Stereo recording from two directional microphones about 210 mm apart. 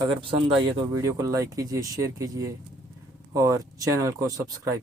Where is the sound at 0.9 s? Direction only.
15° right (ahead or behind).